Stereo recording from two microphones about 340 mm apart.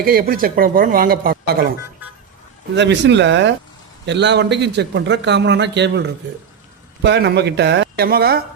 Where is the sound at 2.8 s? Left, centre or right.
Right.